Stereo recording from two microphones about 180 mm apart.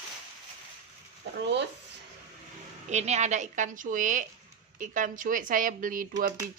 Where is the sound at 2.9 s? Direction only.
40° right (ahead or behind).